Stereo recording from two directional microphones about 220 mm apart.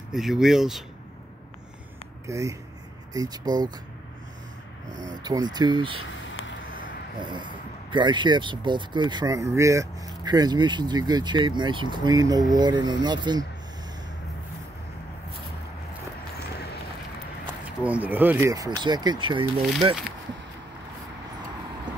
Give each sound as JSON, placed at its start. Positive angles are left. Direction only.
{"t": 0.1, "sound": "speech", "side_deg": 0}
{"t": 2.2, "sound": "speech", "side_deg": -15}
{"t": 5.2, "sound": "speech", "side_deg": -20}
{"t": 6.0, "sound": "a sound", "side_deg": 60}
{"t": 6.7, "sound": "speech", "side_deg": -20}
{"t": 17.8, "sound": "speech", "side_deg": -5}